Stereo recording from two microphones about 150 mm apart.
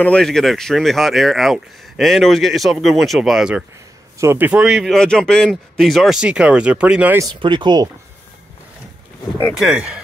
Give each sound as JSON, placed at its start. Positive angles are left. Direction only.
{"t": 0.0, "sound": "speech", "side_deg": 5}
{"t": 4.2, "sound": "speech", "side_deg": -15}
{"t": 7.3, "sound": "speech", "side_deg": -30}
{"t": 9.5, "sound": "speech", "side_deg": -5}